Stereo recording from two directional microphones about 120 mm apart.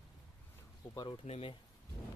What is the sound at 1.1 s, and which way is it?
Speech, 50° left (ahead or behind).